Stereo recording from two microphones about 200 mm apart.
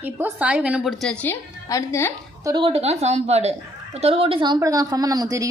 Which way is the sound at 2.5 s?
25° right (ahead or behind).